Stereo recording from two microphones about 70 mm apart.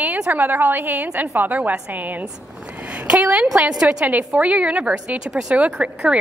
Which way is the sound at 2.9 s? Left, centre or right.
Centre.